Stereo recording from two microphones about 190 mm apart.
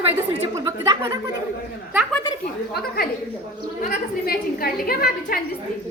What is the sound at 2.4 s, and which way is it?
A woman's voice, 55° left (ahead or behind).